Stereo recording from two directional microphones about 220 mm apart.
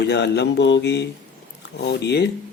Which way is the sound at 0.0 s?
50° left (ahead or behind).